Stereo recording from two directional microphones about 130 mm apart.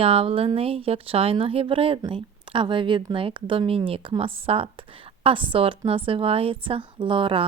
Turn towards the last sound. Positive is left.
turn(degrees=-40)  # may be behind; listen again after turning